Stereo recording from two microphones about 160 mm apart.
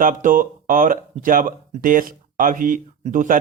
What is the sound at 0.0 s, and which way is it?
Speech, 55° right (ahead or behind).